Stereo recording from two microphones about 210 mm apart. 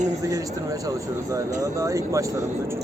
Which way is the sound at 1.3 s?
15° right (ahead or behind).